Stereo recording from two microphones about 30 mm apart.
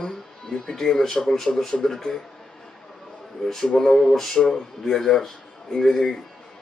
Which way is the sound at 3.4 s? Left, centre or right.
Centre.